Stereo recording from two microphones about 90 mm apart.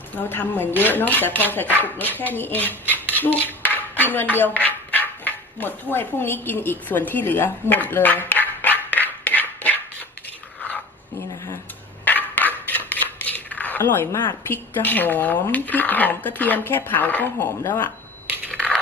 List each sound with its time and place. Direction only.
0.3 s speech: 20° left (ahead or behind)
3.2 s dishes: 20° left (ahead or behind)
4.4 s speech: 20° left (ahead or behind)
7.1 s a sound: 20° left (ahead or behind)
12.0 s scissors: 20° left (ahead or behind)
14.5 s speech: 20° left (ahead or behind)
18.4 s crushing: 20° right (ahead or behind)